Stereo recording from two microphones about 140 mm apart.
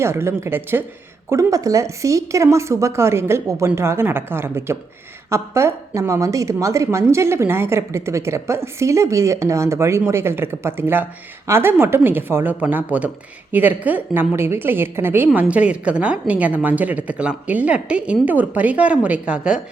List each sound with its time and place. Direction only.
0.0 s a woman's voice: 20° right (ahead or behind)